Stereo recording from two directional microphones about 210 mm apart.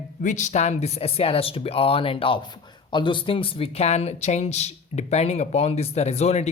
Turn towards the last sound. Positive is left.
turn(degrees=30)  # may be behind; listen again after turning